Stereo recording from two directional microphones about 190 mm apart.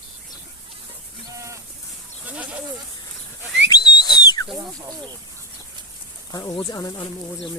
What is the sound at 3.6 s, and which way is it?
Whistle, 20° left (ahead or behind).